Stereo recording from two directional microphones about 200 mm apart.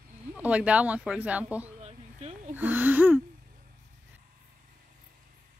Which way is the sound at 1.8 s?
30° right (ahead or behind).